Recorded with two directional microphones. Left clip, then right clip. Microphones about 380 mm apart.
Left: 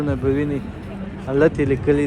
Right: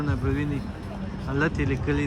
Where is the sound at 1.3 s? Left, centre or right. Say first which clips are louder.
Left 10 dB; centre.